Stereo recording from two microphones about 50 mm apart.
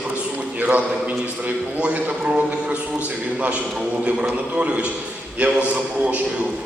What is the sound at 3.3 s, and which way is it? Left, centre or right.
A man's voice, right.